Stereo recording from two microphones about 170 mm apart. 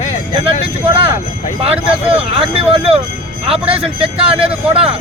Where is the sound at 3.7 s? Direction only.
35° right (ahead or behind).